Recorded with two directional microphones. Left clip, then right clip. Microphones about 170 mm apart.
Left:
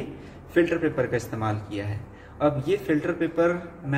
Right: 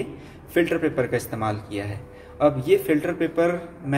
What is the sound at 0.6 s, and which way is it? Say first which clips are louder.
A man's voice: right 1 dB; 30° right (ahead or behind).